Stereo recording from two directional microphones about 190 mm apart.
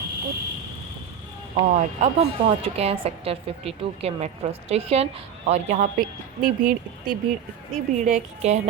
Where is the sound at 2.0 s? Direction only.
30° right (ahead or behind).